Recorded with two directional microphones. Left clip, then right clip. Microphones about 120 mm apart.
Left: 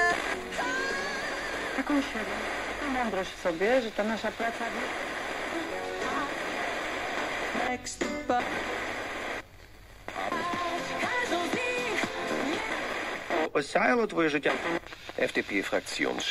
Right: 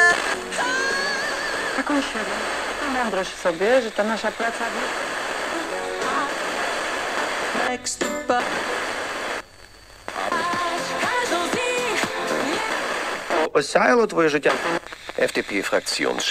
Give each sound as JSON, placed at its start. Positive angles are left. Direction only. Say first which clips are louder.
{"t": 0.0, "sound": "music", "louder": "right 9 dB", "side_deg": -35}
{"t": 10.2, "sound": "music", "louder": "right 8 dB", "side_deg": -40}
{"t": 14.5, "sound": "speech", "louder": "right 7 dB", "side_deg": -40}